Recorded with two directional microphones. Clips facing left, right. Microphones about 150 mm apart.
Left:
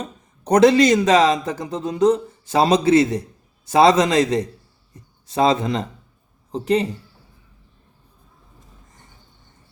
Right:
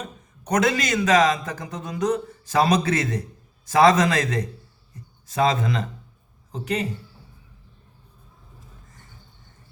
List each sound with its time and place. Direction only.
0.4 s speech: 30° left (ahead or behind)